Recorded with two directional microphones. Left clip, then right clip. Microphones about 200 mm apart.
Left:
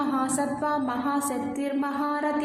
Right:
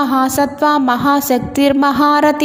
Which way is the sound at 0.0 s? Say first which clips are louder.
Right 12 dB; 45° right (ahead or behind).